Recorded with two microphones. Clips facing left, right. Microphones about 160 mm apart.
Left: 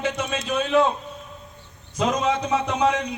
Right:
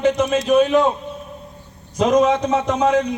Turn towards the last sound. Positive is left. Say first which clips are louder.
# right 5 dB
turn(degrees=-40)  # may be behind; listen again after turning